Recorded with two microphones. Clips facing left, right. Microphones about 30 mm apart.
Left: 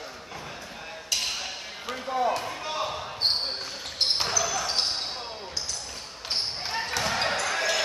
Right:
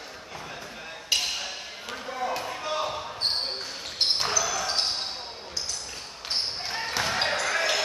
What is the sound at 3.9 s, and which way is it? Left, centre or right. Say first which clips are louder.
Basketball bounce: even; centre.